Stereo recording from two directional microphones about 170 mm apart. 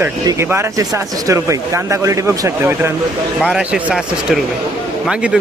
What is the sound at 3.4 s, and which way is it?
Speech, centre (ahead or behind).